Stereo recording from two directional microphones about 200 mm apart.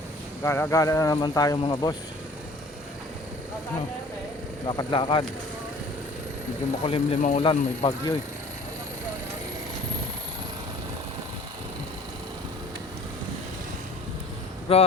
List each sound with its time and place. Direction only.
0.4 s speech: 15° left (ahead or behind)
4.6 s speech: 20° left (ahead or behind)
6.8 s speech: 30° left (ahead or behind)
14.7 s speech: 30° left (ahead or behind)